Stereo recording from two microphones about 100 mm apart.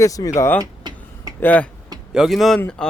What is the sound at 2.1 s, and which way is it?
Speech, centre (ahead or behind).